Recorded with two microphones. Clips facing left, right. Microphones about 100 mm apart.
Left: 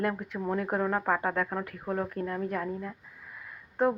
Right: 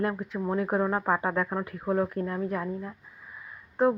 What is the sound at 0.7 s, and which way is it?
Speech, 25° right (ahead or behind).